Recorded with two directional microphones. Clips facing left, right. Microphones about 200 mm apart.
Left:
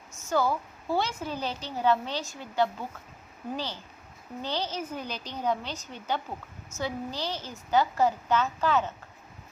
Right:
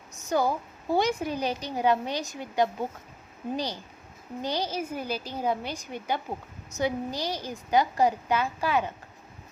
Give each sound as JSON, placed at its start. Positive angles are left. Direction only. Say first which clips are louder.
{"t": 0.1, "sound": "a woman's voice", "louder": "right 1 dB", "side_deg": -15}